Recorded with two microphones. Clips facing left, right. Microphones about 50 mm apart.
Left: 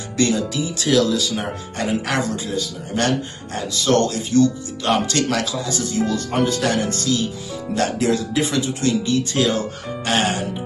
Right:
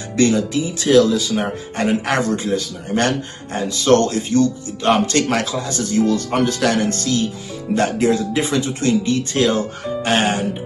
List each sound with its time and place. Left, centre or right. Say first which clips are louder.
0.2 s speech: right 3 dB; right
7.7 s speech: right 3 dB; right